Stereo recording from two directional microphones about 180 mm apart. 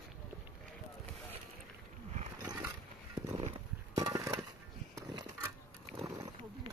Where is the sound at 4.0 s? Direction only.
20° right (ahead or behind).